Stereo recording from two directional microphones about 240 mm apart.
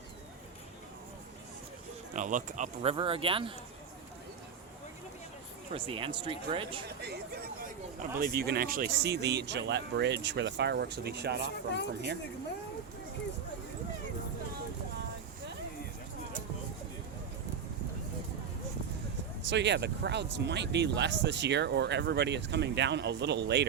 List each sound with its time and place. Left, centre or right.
2.1 s speech: right
5.7 s speech: right
6.8 s speech: right
11.4 s speech: left
19.5 s speech: right